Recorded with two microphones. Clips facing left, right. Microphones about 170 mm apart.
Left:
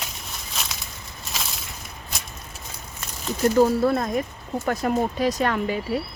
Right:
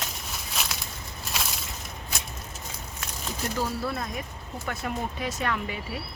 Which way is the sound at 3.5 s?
50° left (ahead or behind).